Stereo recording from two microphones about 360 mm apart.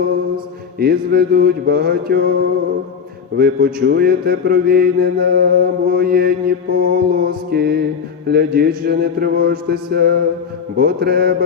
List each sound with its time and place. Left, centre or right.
0.8 s mantra: right
3.3 s mantra: right